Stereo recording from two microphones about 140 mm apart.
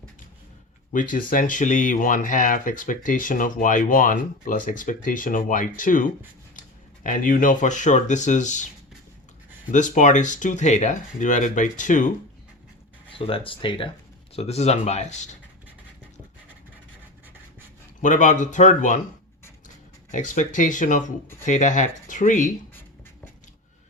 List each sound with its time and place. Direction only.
0.9 s speech: 75° left (ahead or behind); by 8.6 s 60° left (ahead or behind)
9.7 s speech: 60° left (ahead or behind)
13.1 s speech: 40° left (ahead or behind)
14.3 s speech: 50° left (ahead or behind)
18.0 s speech: 60° left (ahead or behind)